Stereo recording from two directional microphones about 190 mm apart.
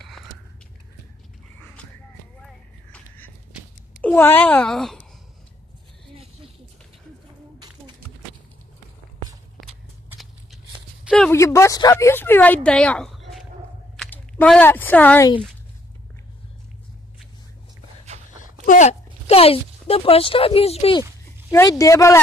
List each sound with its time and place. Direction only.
2.4 s a sound: 5° left (ahead or behind)
4.0 s speech: 10° left (ahead or behind)
11.1 s a sound: 5° left (ahead or behind)
11.3 s speech: 15° left (ahead or behind)
18.4 s speech: 40° left (ahead or behind)
21.5 s speech: 15° left (ahead or behind)